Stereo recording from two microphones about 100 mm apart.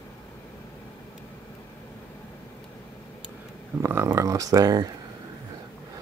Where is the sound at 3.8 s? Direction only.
25° right (ahead or behind).